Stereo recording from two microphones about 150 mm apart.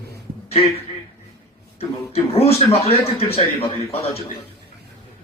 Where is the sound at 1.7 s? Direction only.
40° left (ahead or behind).